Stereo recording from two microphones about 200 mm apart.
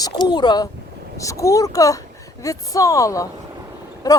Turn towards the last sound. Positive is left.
turn(degrees=20)  # may be behind; listen again after turning